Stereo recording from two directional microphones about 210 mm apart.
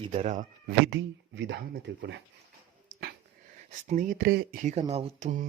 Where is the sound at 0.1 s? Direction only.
30° right (ahead or behind).